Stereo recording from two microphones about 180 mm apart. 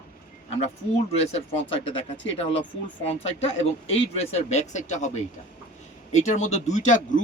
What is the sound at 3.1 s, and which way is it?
A man's voice, 35° left (ahead or behind).